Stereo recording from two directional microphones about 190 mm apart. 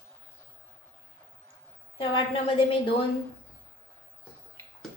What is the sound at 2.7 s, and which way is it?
Speech, 30° left (ahead or behind).